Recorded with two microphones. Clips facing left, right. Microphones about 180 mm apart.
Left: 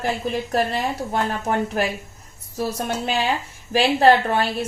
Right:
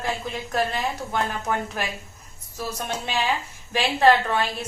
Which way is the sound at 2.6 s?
35° left (ahead or behind).